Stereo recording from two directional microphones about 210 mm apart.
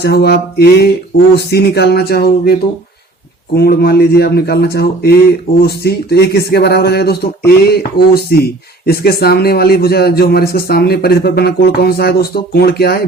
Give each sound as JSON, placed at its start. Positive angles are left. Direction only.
{"t": 0.0, "sound": "a man's voice", "side_deg": 50}